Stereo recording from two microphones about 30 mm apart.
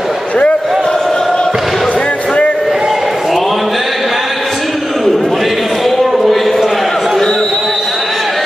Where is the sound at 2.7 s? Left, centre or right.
Centre.